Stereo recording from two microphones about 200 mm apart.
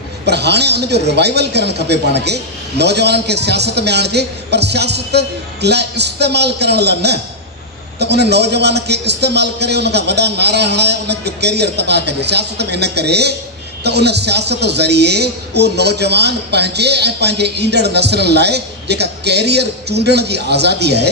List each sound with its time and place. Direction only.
0.3 s a woman's voice: 55° right (ahead or behind)